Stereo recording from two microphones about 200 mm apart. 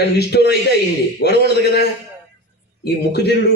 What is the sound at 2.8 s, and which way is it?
Speech, 55° left (ahead or behind).